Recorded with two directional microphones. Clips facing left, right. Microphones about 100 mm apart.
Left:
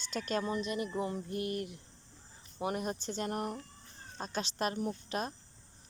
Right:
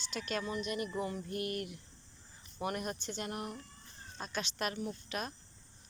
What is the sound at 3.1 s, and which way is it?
Speech, 40° left (ahead or behind).